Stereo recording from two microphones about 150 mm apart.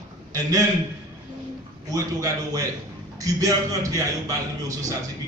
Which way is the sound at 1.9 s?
25° right (ahead or behind).